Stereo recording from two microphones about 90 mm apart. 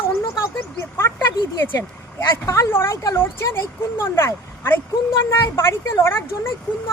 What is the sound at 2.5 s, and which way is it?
Speech, 30° left (ahead or behind).